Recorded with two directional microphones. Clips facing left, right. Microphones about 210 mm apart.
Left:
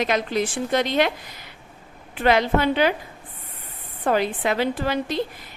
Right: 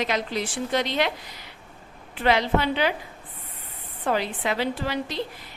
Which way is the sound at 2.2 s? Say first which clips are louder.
Left 3 dB; 50° left (ahead or behind).